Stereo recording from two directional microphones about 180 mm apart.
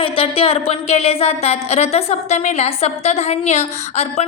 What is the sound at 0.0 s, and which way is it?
A woman's voice, 30° left (ahead or behind).